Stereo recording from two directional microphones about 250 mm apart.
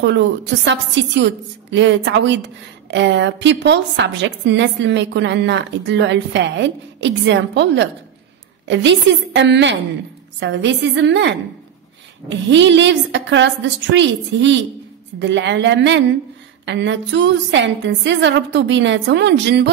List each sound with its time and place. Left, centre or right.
0.0 s a woman's voice: right